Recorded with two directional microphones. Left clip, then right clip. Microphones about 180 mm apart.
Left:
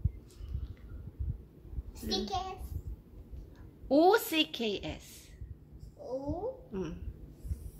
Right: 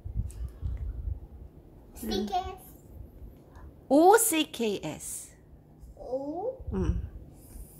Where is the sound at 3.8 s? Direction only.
30° right (ahead or behind).